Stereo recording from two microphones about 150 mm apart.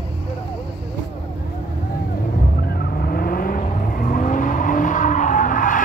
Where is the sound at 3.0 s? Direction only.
80° left.